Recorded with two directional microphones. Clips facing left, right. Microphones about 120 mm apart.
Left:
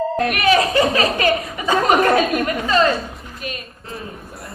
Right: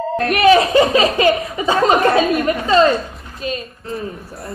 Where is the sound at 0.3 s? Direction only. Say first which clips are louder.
Right 8 dB; 30° right (ahead or behind).